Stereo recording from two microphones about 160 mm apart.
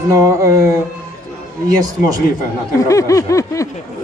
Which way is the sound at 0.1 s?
20° right (ahead or behind).